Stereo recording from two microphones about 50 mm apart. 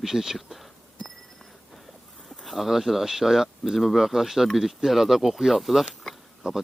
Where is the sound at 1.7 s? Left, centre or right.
Centre.